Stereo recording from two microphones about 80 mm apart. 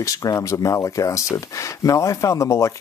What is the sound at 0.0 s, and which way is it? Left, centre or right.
Speech, left.